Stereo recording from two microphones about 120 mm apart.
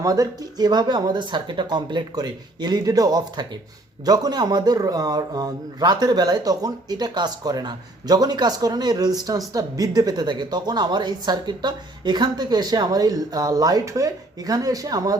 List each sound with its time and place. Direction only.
0.0 s speech: 30° right (ahead or behind)